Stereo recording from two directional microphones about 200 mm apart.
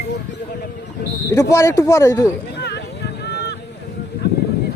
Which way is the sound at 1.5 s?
15° left (ahead or behind).